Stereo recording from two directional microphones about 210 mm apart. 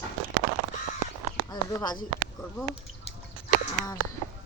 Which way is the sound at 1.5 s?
20° left (ahead or behind).